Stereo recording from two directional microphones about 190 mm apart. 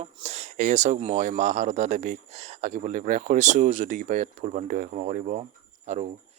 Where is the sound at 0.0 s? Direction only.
35° right (ahead or behind).